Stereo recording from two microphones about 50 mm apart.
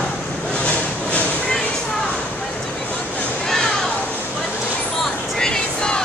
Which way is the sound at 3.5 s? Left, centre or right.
Centre.